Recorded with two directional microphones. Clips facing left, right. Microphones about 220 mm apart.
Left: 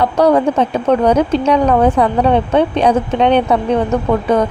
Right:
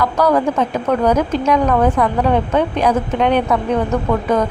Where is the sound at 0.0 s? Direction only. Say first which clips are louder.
Left 3 dB; 30° left (ahead or behind).